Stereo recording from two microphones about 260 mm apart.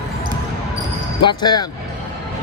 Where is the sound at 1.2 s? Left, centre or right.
Centre.